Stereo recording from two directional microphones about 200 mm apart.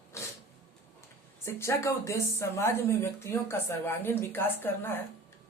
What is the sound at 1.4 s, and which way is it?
Speech, 15° left (ahead or behind).